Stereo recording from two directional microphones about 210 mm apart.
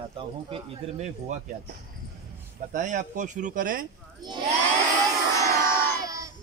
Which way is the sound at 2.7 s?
35° right (ahead or behind).